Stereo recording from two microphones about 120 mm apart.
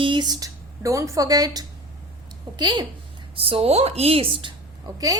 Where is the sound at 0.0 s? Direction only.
40° right (ahead or behind).